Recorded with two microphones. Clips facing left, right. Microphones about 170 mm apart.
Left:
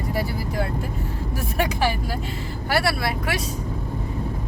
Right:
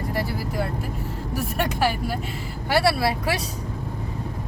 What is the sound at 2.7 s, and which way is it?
Speech, 30° right (ahead or behind).